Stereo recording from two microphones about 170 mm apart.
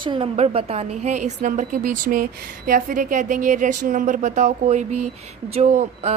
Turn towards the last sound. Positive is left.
turn(degrees=-40)  # may be behind; listen again after turning